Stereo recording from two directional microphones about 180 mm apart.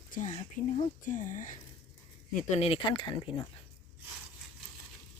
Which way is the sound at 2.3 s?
35° left (ahead or behind).